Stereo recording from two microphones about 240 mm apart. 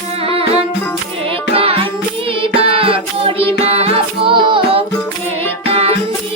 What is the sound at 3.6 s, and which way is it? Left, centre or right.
Music, right.